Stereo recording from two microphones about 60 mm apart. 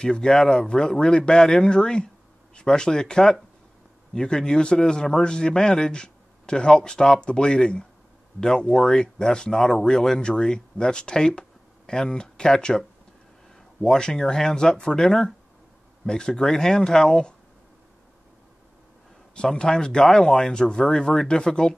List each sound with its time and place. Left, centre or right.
0.0 s speech: centre
19.3 s speech: centre